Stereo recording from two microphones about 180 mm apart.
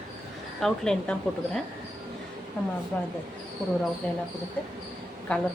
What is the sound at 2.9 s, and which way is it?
Speech, 10° left (ahead or behind).